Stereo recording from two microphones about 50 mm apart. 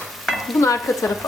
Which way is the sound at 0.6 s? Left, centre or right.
Left.